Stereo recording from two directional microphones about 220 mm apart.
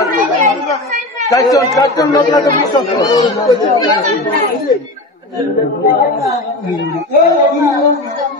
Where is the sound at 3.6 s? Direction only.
25° left (ahead or behind).